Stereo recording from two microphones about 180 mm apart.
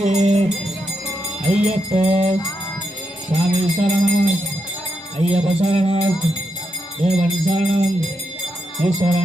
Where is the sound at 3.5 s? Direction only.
35° right (ahead or behind).